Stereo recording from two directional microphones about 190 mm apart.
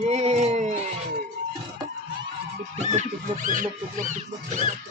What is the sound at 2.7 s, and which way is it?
Speech, 35° right (ahead or behind).